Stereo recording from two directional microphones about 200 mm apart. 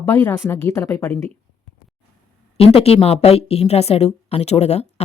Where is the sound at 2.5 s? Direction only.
30° left (ahead or behind).